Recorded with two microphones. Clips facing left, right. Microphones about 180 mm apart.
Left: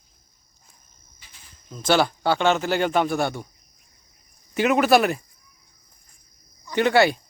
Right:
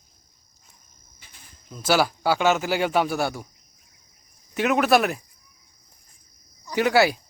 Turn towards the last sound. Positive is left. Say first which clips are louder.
# left 1 dB
turn(degrees=-5)  # may be behind; listen again after turning